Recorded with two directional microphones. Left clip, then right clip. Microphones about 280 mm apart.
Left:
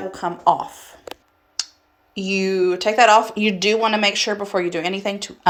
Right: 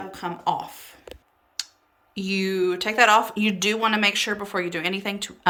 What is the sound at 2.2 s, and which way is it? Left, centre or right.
Speech, centre.